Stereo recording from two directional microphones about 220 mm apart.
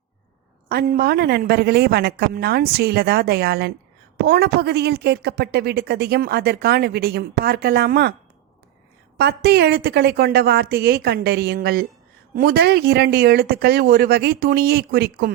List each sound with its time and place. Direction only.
0.7 s a woman's voice: 45° right (ahead or behind)
9.1 s a woman's voice: 50° right (ahead or behind)